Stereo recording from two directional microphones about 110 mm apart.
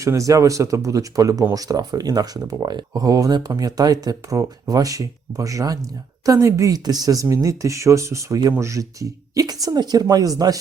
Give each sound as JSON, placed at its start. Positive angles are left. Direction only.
{"t": 0.0, "sound": "speech", "side_deg": -30}